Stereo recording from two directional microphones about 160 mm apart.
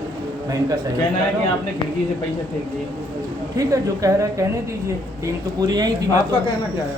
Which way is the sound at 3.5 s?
20° right (ahead or behind).